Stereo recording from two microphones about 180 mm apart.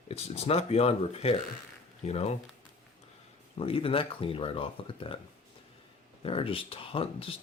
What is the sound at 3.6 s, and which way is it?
Speech, 30° left (ahead or behind).